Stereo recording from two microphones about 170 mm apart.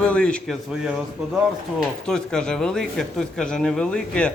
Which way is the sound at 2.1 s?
5° left (ahead or behind).